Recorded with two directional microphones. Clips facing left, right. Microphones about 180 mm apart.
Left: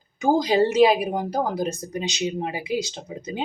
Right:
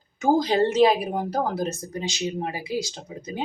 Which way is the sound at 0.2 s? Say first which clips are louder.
Left 1 dB; 10° left (ahead or behind).